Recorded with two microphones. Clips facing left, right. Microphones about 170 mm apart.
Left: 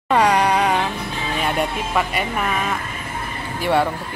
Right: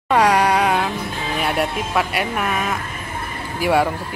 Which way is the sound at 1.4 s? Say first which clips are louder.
Right 1 dB; 5° right (ahead or behind).